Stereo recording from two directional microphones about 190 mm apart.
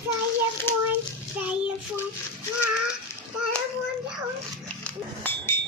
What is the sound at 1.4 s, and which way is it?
Child singing, 5° right (ahead or behind).